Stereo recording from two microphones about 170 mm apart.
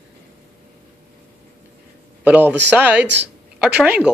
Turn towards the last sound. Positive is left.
turn(degrees=-10)  # may be behind; listen again after turning